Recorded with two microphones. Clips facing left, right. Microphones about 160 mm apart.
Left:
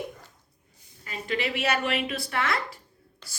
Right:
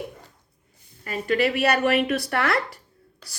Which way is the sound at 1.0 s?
55° right (ahead or behind).